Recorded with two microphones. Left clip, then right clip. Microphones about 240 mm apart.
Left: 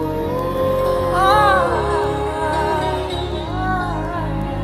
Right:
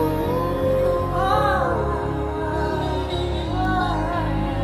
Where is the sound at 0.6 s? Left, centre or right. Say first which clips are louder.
Left 1 dB; centre.